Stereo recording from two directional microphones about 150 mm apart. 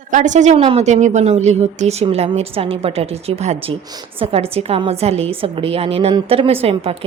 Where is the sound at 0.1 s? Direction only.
55° right (ahead or behind).